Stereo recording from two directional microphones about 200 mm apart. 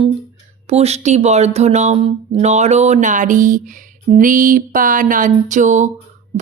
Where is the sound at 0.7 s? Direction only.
30° right (ahead or behind).